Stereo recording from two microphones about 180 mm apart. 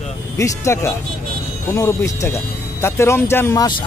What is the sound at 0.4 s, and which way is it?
Speech, 15° left (ahead or behind).